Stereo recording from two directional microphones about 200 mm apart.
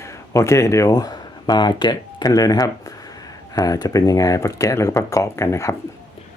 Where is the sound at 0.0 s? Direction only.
15° left (ahead or behind).